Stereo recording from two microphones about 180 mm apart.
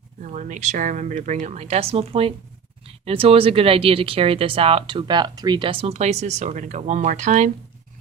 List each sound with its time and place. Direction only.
0.2 s speech: 45° right (ahead or behind)